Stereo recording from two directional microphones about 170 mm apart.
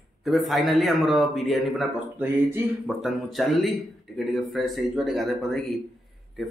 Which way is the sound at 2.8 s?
Centre (ahead or behind).